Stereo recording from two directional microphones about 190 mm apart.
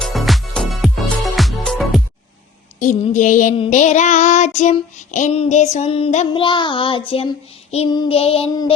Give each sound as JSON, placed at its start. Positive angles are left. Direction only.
{"t": 0.0, "sound": "music", "side_deg": 0}
{"t": 2.7, "sound": "child singing", "side_deg": 40}